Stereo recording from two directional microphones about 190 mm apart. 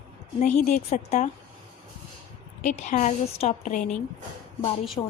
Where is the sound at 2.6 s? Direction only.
40° left (ahead or behind).